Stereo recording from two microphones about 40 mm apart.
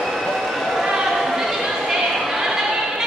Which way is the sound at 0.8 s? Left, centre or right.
Centre.